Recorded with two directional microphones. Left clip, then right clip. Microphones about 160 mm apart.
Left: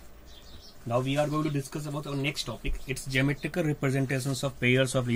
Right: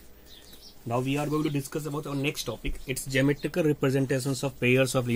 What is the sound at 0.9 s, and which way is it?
Speech, 20° right (ahead or behind).